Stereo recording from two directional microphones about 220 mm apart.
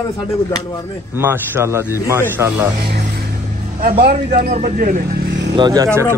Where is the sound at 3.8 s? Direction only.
45° right (ahead or behind).